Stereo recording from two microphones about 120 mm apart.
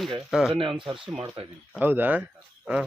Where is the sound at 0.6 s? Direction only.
45° right (ahead or behind).